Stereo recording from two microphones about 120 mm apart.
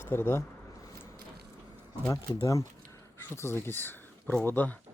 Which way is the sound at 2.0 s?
30° left (ahead or behind).